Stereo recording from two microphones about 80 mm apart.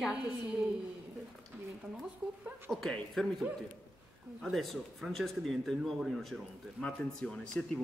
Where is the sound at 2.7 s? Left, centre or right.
Centre.